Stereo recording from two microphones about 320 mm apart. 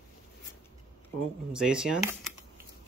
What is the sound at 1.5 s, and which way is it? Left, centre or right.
Speech, centre.